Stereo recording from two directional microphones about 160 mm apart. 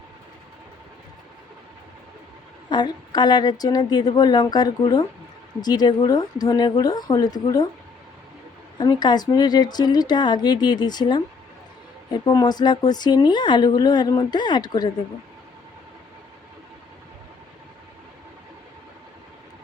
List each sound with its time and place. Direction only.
2.6 s speech: 25° left (ahead or behind)
8.8 s speech: 25° left (ahead or behind)